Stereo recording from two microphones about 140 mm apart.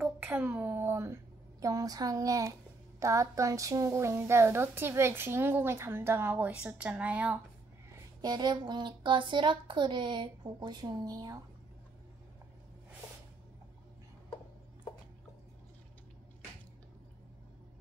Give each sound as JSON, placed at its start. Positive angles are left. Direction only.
{"t": 0.0, "sound": "a woman's voice", "side_deg": -15}
{"t": 8.2, "sound": "speech", "side_deg": -30}